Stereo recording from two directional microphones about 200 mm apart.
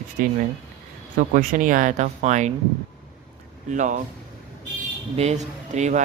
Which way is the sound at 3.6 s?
35° right (ahead or behind).